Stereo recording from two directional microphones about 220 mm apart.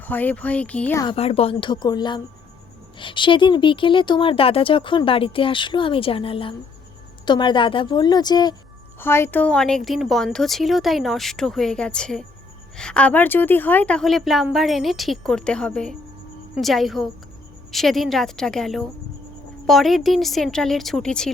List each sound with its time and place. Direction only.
0.0 s speech: 10° left (ahead or behind)
1.0 s speech: 25° left (ahead or behind); by 21.3 s 5° left (ahead or behind)